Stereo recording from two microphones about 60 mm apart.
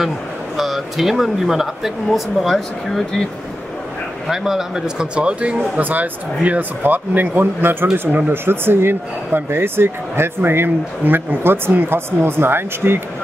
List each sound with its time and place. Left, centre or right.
0.6 s speech: centre
2.4 s speech: centre
4.3 s speech: centre
5.8 s speech: right
8.3 s speech: right